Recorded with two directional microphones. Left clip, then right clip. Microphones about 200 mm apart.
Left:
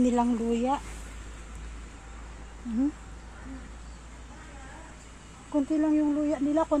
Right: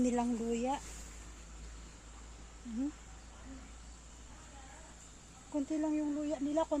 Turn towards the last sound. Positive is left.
turn(degrees=15)  # may be behind; listen again after turning